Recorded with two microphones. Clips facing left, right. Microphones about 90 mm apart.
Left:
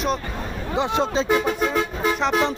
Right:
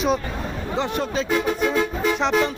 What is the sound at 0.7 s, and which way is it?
Speech, 20° left (ahead or behind).